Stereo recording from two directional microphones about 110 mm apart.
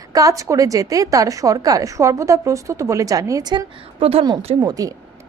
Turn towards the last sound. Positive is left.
turn(degrees=-35)  # may be behind; listen again after turning